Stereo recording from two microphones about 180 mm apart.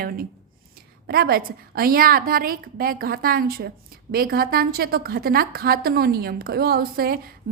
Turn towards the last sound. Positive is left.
turn(degrees=-55)  # may be behind; listen again after turning